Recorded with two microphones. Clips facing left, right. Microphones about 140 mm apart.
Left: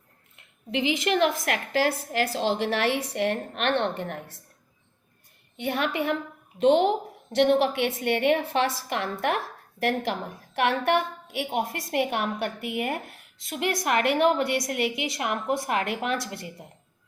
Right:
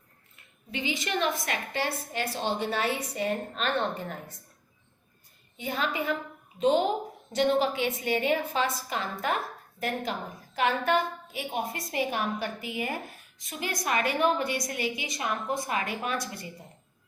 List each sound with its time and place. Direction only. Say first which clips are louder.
0.7 s a woman's voice: left 7 dB; 80° left
5.5 s a woman's voice: left 4 dB; 65° left (ahead or behind)